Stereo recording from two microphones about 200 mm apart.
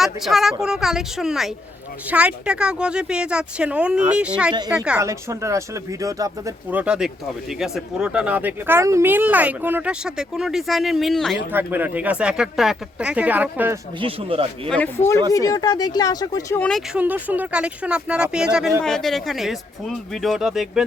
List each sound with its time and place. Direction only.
0.0 s speech: centre (ahead or behind)
11.5 s speech: 10° right (ahead or behind)
14.0 s speech: 25° right (ahead or behind)
14.7 s speech: 10° left (ahead or behind)
16.6 s speech: 5° left (ahead or behind)